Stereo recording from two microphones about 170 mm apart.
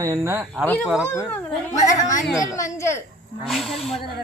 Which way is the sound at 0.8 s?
5° right (ahead or behind).